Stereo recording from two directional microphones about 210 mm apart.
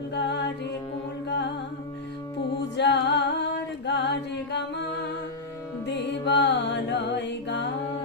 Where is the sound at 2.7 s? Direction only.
55° left (ahead or behind).